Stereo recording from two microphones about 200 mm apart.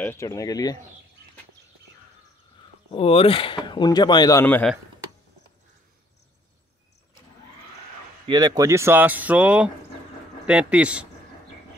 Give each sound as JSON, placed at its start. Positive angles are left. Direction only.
{"t": 0.0, "sound": "speech", "side_deg": 15}
{"t": 2.9, "sound": "speech", "side_deg": 30}
{"t": 8.3, "sound": "a man's voice", "side_deg": -20}